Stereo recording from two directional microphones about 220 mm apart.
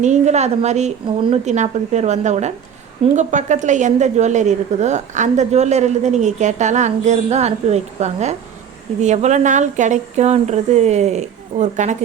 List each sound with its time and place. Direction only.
0.0 s a woman's voice: 30° right (ahead or behind)